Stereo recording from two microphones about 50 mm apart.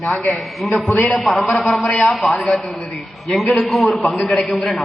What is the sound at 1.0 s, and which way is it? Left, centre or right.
Speech, left.